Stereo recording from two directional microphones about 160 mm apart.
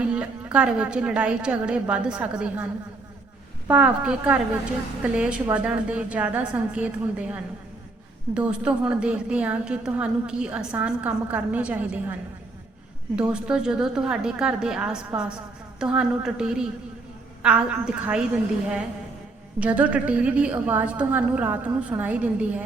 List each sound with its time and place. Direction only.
0.0 s a woman's voice: 5° right (ahead or behind)
3.7 s a woman's voice: 10° right (ahead or behind)
13.1 s a woman's voice: 5° right (ahead or behind)
19.5 s a woman's voice: 10° right (ahead or behind)